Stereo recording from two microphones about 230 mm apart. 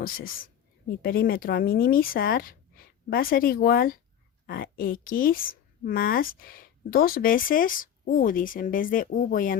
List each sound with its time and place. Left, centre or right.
0.0 s a woman's voice: left